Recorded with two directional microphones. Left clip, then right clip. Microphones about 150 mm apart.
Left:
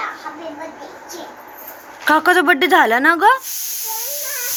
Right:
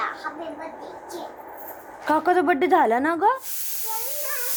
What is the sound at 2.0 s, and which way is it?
Speech, 5° right (ahead or behind).